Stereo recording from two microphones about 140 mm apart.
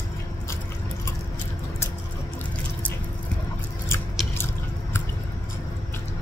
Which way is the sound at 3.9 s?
15° left (ahead or behind).